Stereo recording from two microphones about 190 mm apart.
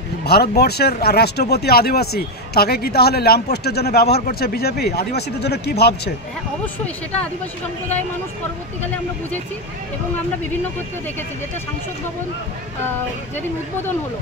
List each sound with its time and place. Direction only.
0.2 s speech: 55° left (ahead or behind)